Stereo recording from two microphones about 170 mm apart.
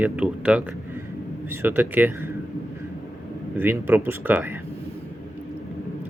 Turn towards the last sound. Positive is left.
turn(degrees=-15)  # may be behind; listen again after turning